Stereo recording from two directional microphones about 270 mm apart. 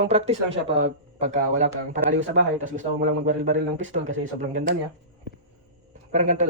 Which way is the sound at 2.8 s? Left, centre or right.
Right.